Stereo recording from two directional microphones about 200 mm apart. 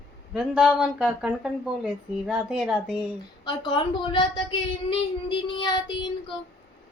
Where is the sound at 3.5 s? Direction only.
25° left (ahead or behind).